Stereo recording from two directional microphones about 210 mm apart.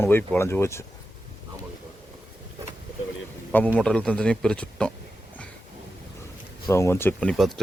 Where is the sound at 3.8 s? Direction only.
5° left (ahead or behind).